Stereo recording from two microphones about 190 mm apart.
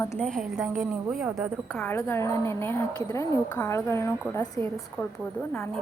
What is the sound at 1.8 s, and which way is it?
A woman's voice, 10° left (ahead or behind).